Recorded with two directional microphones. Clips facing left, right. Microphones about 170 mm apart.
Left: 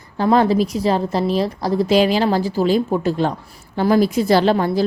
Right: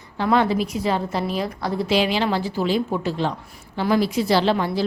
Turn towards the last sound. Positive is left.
turn(degrees=45)  # may be behind; listen again after turning